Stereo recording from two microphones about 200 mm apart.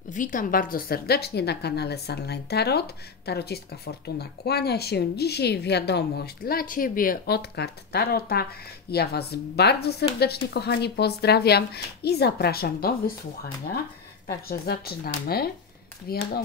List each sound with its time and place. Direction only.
0.1 s speech: 40° left (ahead or behind)
14.2 s speech: 50° left (ahead or behind)